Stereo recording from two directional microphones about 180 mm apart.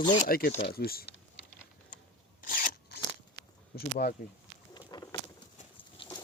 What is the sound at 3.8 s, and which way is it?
Speech, 60° left (ahead or behind).